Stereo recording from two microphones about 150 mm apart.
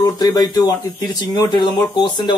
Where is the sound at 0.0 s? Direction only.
25° left (ahead or behind).